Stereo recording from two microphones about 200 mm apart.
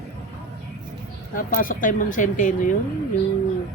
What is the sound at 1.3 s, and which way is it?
Speech, 45° left (ahead or behind).